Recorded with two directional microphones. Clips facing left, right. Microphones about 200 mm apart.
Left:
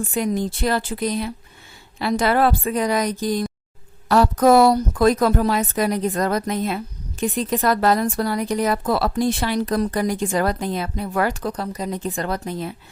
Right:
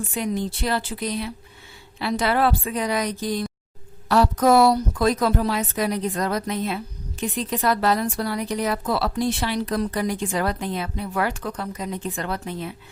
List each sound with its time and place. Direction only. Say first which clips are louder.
0.1 s a woman's voice: left 3 dB; 45° left (ahead or behind)